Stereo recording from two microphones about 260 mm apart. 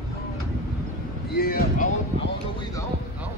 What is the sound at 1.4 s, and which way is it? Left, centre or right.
Boat, left.